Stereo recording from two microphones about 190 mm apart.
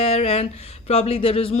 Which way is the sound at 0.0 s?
30° left (ahead or behind).